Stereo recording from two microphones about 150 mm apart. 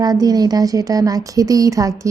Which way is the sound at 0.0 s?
25° right (ahead or behind).